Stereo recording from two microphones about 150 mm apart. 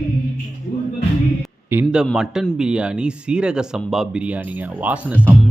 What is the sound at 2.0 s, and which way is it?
Speech, 5° right (ahead or behind).